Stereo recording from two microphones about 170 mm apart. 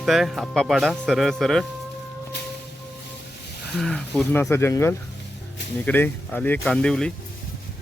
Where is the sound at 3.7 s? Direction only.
Centre (ahead or behind).